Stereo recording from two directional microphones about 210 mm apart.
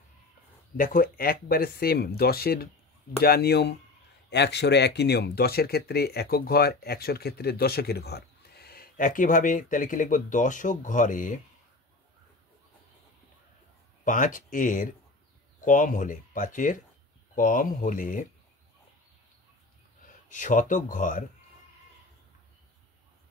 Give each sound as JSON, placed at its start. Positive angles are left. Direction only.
{"t": 0.7, "sound": "speech", "side_deg": 40}
{"t": 14.0, "sound": "speech", "side_deg": 40}
{"t": 20.2, "sound": "speech", "side_deg": 35}